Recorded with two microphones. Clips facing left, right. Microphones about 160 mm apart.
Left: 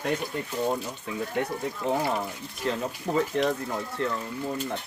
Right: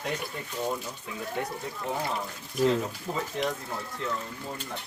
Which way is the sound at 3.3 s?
60° left (ahead or behind).